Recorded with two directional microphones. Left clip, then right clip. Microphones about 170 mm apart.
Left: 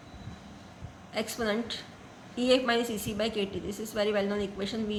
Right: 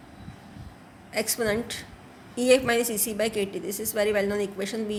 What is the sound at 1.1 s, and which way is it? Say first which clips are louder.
A woman's voice: right 5 dB; 40° right (ahead or behind).